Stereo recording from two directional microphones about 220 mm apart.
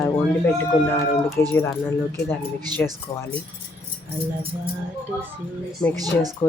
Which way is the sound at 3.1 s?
20° left (ahead or behind).